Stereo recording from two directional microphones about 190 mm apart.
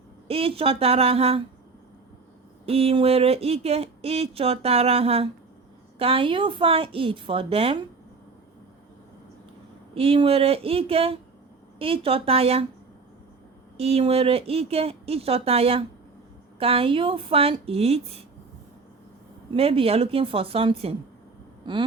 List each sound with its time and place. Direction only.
0.3 s speech: 30° right (ahead or behind)
2.6 s a woman's voice: 30° right (ahead or behind)
9.9 s speech: 30° right (ahead or behind)
13.7 s a woman's voice: 30° right (ahead or behind)
19.5 s a woman's voice: 30° right (ahead or behind)